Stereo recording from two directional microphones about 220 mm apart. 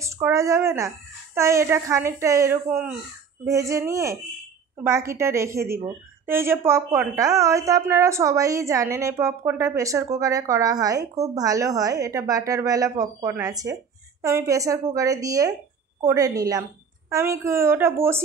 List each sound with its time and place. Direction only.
0.0 s a woman's voice: 15° right (ahead or behind)